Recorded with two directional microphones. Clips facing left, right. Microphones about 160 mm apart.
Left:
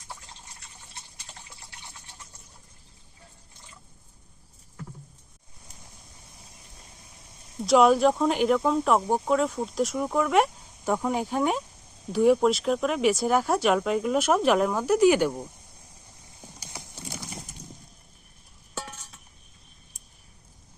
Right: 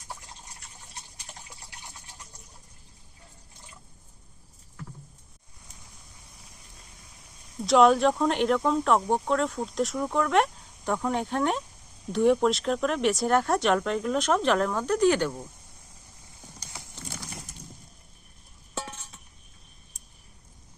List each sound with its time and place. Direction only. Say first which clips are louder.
1.3 s water: right 1 dB; 15° right (ahead or behind)
7.6 s speech: left 1 dB; centre (ahead or behind)
16.6 s clip-clop: left 2 dB; 15° left (ahead or behind)
18.7 s a sound: right 2 dB; 25° right (ahead or behind)